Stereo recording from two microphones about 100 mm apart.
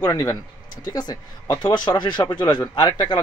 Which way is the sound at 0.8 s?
45° left (ahead or behind).